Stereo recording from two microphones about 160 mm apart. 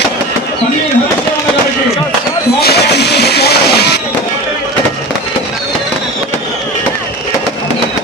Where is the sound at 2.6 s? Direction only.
85° left.